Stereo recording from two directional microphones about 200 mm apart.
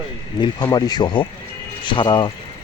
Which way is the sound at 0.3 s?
20° left (ahead or behind).